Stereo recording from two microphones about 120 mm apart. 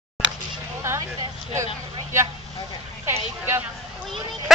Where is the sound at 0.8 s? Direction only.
25° right (ahead or behind).